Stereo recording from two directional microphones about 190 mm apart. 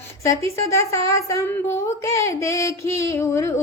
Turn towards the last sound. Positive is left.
turn(degrees=15)  # may be behind; listen again after turning